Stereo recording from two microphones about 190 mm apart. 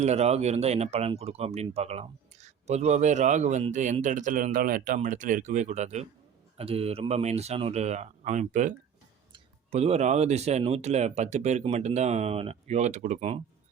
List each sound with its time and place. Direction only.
0.0 s speech: 35° right (ahead or behind)